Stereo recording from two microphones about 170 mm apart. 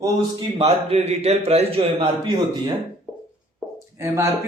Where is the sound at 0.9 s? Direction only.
40° right (ahead or behind).